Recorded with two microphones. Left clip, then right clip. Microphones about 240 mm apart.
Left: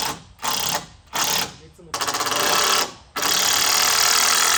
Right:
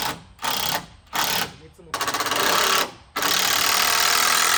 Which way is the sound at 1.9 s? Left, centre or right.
Centre.